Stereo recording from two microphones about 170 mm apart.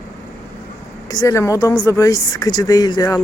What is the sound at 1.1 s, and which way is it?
Speech, 20° left (ahead or behind).